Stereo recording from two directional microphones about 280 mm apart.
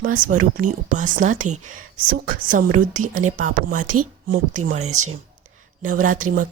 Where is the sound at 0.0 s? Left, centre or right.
Right.